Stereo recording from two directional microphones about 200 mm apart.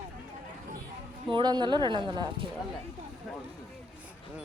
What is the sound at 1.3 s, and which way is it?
A woman's voice, 20° right (ahead or behind).